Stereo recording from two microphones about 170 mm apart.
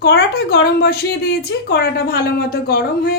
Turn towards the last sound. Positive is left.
turn(degrees=65)  # may be behind; listen again after turning